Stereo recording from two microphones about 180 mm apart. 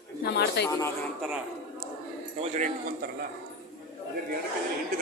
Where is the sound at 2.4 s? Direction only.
45° right (ahead or behind).